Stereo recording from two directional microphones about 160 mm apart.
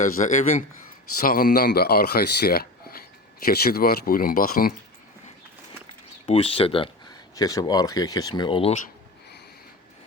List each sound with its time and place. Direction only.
0.2 s a man's voice: 45° left (ahead or behind)
1.2 s speech: 65° left (ahead or behind)
6.2 s speech: 40° left (ahead or behind)